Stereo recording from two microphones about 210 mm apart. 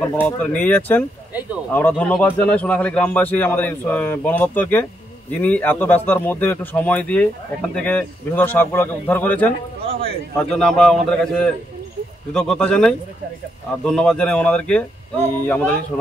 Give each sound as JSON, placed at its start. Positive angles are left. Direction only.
{"t": 0.1, "sound": "a man's voice", "side_deg": 5}
{"t": 9.8, "sound": "a sound", "side_deg": -25}
{"t": 10.5, "sound": "a man's voice", "side_deg": 5}